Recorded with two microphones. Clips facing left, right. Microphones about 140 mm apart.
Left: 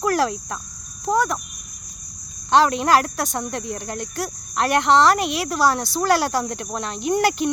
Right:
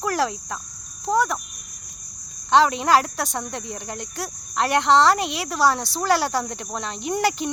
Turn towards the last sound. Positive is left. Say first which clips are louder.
# left 3 dB
turn(degrees=-25)  # may be behind; listen again after turning